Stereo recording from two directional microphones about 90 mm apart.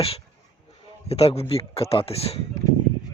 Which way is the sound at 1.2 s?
90° left.